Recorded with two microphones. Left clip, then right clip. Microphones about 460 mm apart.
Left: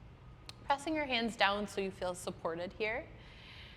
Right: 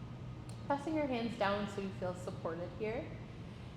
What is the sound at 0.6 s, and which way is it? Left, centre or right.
A woman's voice, left.